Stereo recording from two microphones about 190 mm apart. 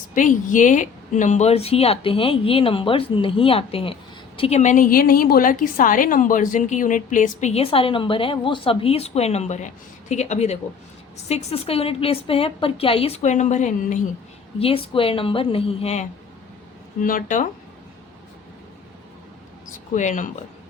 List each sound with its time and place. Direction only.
0.1 s a woman's voice: 45° left (ahead or behind)
14.6 s a woman's voice: 30° left (ahead or behind)
17.0 s speech: 45° left (ahead or behind)
19.9 s a woman's voice: 40° left (ahead or behind)